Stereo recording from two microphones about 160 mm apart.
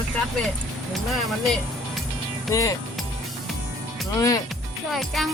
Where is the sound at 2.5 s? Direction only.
20° left (ahead or behind).